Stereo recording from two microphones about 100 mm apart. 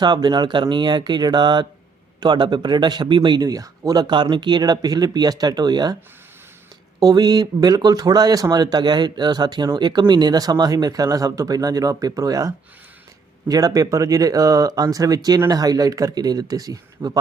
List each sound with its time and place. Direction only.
0.0 s a man's voice: 45° right (ahead or behind)
7.0 s speech: 40° right (ahead or behind)